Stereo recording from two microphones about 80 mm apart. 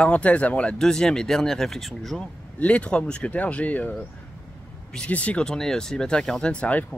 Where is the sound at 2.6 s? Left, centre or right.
Centre.